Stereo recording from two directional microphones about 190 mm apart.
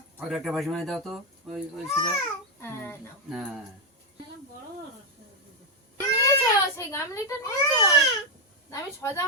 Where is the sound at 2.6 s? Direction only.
10° left (ahead or behind).